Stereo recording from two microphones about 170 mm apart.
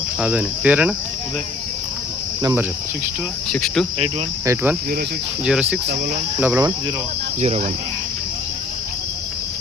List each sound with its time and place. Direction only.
0.2 s cricket: 10° right (ahead or behind)
2.4 s speech: 20° right (ahead or behind)
3.5 s insect: 5° left (ahead or behind)
4.4 s cricket: 10° right (ahead or behind)
5.5 s insect: 5° right (ahead or behind)
6.4 s cricket: 15° right (ahead or behind)
7.4 s speech: 40° right (ahead or behind)